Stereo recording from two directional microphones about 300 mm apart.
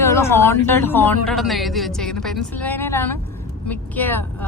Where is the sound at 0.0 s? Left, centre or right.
Centre.